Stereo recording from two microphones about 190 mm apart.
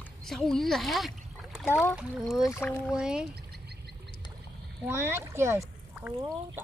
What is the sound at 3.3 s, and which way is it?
Bird, 60° right (ahead or behind).